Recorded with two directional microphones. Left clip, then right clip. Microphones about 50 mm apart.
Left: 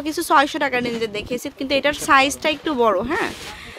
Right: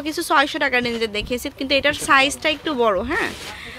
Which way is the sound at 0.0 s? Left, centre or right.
Left.